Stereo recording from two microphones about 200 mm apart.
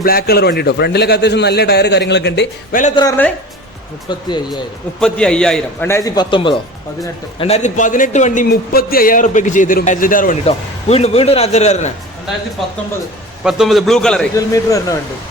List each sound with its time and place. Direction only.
0.0 s a man's voice: 50° left (ahead or behind)
2.9 s speech: 20° left (ahead or behind)
4.9 s a man's voice: 5° left (ahead or behind); by 11.9 s 35° left (ahead or behind)
13.4 s a man's voice: centre (ahead or behind)
14.3 s a man's voice: 15° left (ahead or behind)